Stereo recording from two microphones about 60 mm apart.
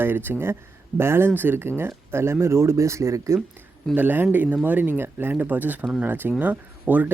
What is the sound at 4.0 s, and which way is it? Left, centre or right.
Speech, right.